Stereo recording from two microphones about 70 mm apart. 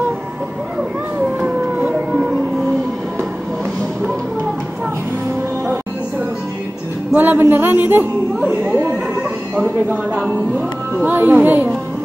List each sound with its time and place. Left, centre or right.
1.4 s a sound: centre
7.2 s a man's voice: right
11.1 s a man's voice: right